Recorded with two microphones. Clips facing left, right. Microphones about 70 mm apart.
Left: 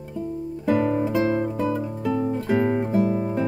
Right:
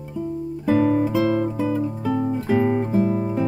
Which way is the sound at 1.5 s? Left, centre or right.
Centre.